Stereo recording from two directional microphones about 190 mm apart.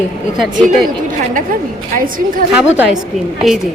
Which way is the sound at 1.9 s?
45° right (ahead or behind).